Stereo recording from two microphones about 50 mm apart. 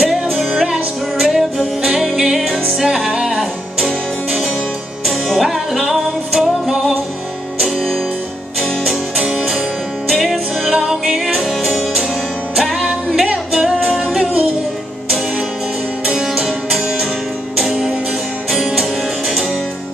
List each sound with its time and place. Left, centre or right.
0.0 s music: centre
5.0 s music: centre
7.6 s music: centre
13.6 s music: centre
16.1 s music: centre